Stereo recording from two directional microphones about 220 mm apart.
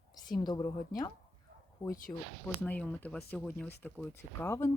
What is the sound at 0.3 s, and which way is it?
Speech, 20° left (ahead or behind).